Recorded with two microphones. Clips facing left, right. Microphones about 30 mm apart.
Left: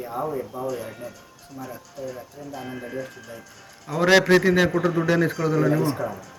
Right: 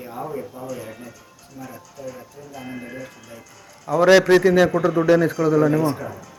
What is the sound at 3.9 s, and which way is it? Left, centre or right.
Speech, centre.